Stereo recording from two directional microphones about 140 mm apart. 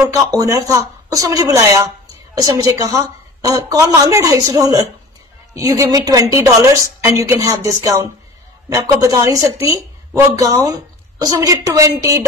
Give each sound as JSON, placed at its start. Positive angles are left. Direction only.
{"t": 0.0, "sound": "a woman's voice", "side_deg": -25}